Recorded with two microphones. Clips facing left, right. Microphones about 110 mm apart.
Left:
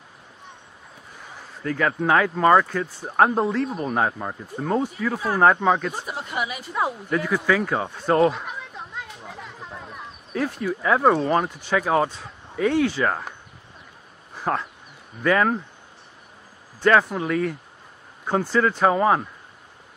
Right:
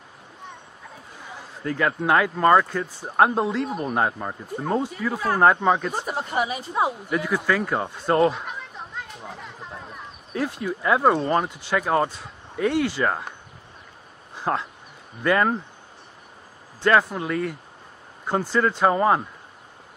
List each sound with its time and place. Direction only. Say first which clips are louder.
1.6 s speech: left 1 dB; 5° right (ahead or behind)
5.9 s a woman's voice: right 3 dB; 45° right (ahead or behind); by 7.0 s 25° right (ahead or behind)
7.1 s speech: left 1 dB; 5° right (ahead or behind)
9.2 s a sound: even; 5° right (ahead or behind)
11.7 s speech: left 1 dB; centre (ahead or behind)
14.3 s a sound: even; 10° right (ahead or behind)
15.2 s speech: left 1 dB; 5° right (ahead or behind)
16.8 s speech: left 1 dB; centre (ahead or behind)
18.2 s speech: left 1 dB; 10° right (ahead or behind)
18.9 s speech: even; centre (ahead or behind)